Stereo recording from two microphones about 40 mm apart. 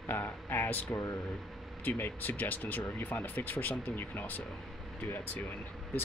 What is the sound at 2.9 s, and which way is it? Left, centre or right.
Speech, left.